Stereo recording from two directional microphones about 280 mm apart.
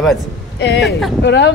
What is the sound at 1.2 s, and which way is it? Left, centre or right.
Speech, left.